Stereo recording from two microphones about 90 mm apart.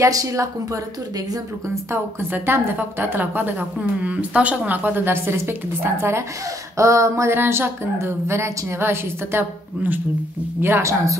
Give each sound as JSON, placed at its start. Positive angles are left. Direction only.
{"t": 0.0, "sound": "a woman's voice", "side_deg": -40}
{"t": 1.9, "sound": "a woman's voice", "side_deg": -25}